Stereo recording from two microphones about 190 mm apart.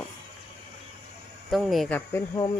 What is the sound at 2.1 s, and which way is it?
Speech, 20° left (ahead or behind).